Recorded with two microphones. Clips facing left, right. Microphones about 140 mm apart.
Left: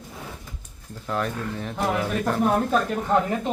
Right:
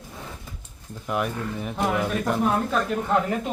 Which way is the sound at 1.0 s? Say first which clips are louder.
Even; 15° right (ahead or behind).